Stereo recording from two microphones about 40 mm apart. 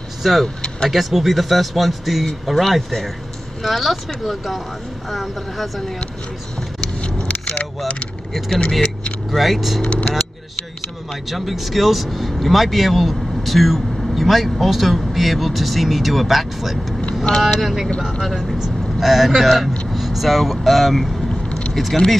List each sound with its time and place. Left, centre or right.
0.2 s speech: centre
6.8 s a sound: left
8.5 s speech: left
9.3 s speech: centre
11.2 s speech: centre
21.5 s vehicle: left
21.7 s speech: centre